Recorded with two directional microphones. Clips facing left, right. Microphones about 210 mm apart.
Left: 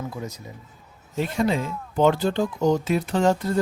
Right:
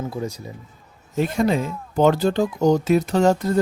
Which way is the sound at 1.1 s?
45° right (ahead or behind).